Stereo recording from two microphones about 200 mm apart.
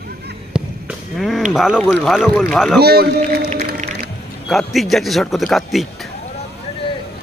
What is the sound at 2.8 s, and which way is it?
Speech, 55° right (ahead or behind).